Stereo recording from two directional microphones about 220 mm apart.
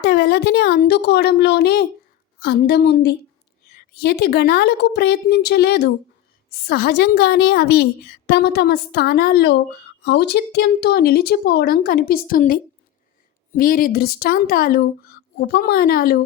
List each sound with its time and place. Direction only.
0.0 s a woman's voice: 45° left (ahead or behind)
13.6 s a woman's voice: 40° left (ahead or behind)